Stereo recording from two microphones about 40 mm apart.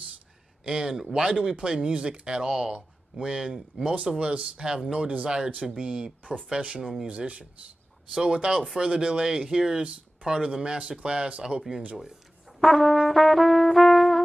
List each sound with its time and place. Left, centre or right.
0.7 s speech: centre
4.2 s speech: right
6.8 s speech: centre
7.1 s speech: right
8.1 s speech: centre
12.5 s brass instrument: centre